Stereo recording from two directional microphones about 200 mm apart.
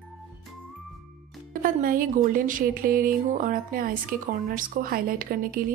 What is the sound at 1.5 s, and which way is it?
Speech, 45° right (ahead or behind).